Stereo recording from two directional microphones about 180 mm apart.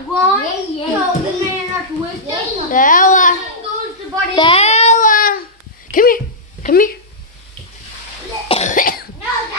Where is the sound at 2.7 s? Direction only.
50° left (ahead or behind).